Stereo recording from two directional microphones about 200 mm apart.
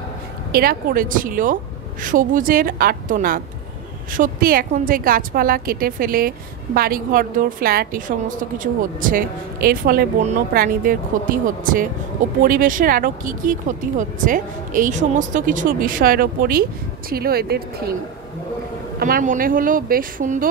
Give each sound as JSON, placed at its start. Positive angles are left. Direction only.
{"t": 0.5, "sound": "a woman's voice", "side_deg": -50}
{"t": 18.9, "sound": "a woman's voice", "side_deg": -45}